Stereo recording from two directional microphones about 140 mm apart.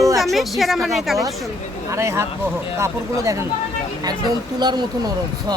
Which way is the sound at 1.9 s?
20° right (ahead or behind).